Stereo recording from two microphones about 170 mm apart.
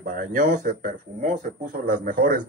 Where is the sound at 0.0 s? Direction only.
55° right (ahead or behind).